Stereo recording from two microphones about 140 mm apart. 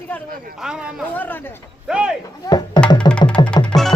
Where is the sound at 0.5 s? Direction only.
5° right (ahead or behind).